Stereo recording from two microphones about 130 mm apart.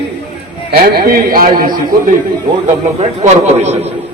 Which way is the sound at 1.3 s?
90° right.